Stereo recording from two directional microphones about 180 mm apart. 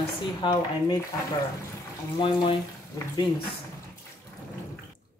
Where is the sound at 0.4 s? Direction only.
25° left (ahead or behind).